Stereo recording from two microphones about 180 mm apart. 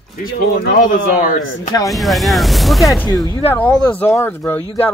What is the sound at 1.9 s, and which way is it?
Speech, centre (ahead or behind).